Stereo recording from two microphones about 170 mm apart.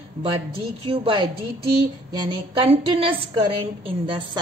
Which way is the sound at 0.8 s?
30° right (ahead or behind).